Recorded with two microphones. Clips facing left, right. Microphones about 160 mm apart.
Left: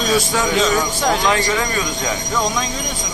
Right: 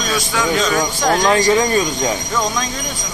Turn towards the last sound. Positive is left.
turn(degrees=-25)  # may be behind; listen again after turning